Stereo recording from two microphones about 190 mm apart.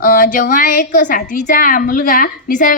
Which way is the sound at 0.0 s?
45° left (ahead or behind).